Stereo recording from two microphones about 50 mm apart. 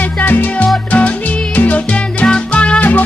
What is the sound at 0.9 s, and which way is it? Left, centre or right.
Music, left.